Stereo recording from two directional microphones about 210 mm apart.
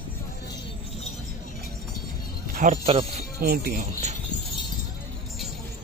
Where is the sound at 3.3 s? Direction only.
45° right (ahead or behind).